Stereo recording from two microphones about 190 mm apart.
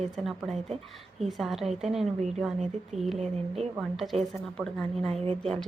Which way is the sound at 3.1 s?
35° right (ahead or behind).